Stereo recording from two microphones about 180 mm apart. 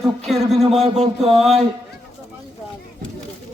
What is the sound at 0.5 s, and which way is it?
Speech, 35° right (ahead or behind).